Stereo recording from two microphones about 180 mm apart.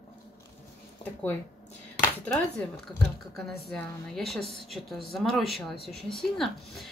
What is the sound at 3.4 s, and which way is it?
A woman's voice, centre (ahead or behind).